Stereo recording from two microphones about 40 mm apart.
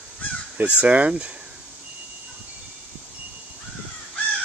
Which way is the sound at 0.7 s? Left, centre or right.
Right.